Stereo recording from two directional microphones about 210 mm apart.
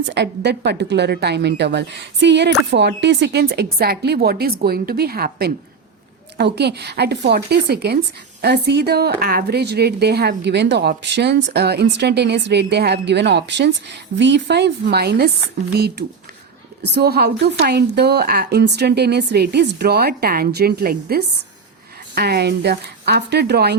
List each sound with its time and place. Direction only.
0.1 s a woman's voice: 55° right (ahead or behind)